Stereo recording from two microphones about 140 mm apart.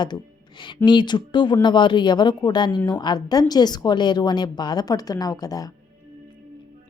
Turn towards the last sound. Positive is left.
turn(degrees=25)  # may be behind; listen again after turning